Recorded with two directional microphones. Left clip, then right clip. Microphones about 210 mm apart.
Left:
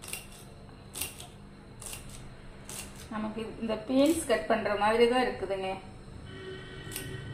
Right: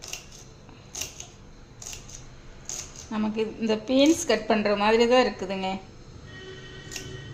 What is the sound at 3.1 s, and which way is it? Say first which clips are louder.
A woman's voice: right 8 dB; 55° right (ahead or behind).